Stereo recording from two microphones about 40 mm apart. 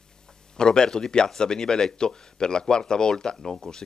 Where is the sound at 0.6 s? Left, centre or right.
Centre.